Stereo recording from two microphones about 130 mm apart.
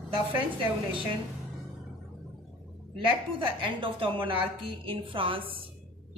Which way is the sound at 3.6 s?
40° right (ahead or behind).